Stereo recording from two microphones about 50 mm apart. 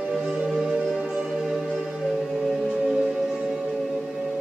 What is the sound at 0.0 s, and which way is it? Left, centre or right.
Music, centre.